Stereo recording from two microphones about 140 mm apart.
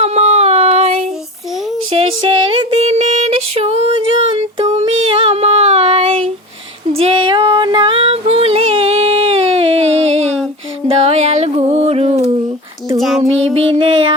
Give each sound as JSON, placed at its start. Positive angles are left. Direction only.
{"t": 0.0, "sound": "child singing", "side_deg": -50}
{"t": 1.9, "sound": "a sound", "side_deg": -40}
{"t": 6.9, "sound": "female singing", "side_deg": -40}
{"t": 10.8, "sound": "music", "side_deg": -45}
{"t": 13.5, "sound": "child singing", "side_deg": -40}